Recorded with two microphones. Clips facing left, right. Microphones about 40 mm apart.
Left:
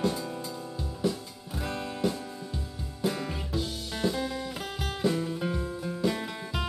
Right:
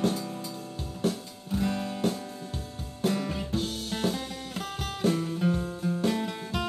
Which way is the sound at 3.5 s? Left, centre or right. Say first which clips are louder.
Right 2 dB; right.